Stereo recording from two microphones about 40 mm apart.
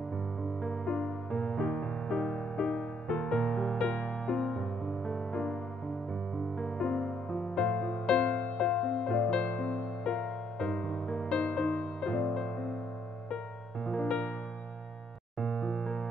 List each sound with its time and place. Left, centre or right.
0.4 s music: centre
6.6 s music: centre
13.8 s music: centre
15.4 s music: centre